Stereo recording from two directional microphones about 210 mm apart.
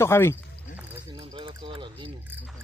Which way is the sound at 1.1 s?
25° right (ahead or behind).